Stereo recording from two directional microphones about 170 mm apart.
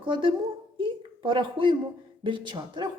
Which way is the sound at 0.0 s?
30° right (ahead or behind).